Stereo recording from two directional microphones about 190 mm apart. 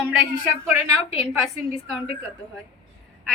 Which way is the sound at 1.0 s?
30° left (ahead or behind).